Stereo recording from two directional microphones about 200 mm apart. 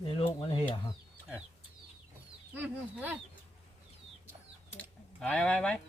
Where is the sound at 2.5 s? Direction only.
10° right (ahead or behind).